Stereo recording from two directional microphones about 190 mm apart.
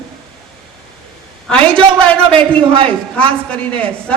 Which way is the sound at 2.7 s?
30° right (ahead or behind).